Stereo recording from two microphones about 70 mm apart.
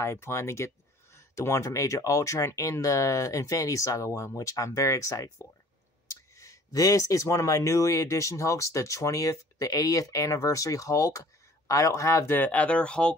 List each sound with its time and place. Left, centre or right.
0.0 s speech: left
12.3 s speech: left